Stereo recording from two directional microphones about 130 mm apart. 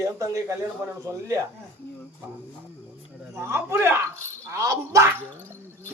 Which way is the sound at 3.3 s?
20° right (ahead or behind).